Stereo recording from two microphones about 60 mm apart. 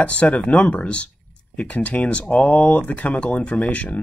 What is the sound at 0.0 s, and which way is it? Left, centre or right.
Speech, left.